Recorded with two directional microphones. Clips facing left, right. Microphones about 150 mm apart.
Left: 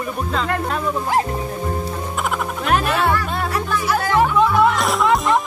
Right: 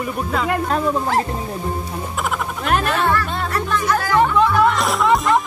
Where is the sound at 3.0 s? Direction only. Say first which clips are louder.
Even; 10° left (ahead or behind).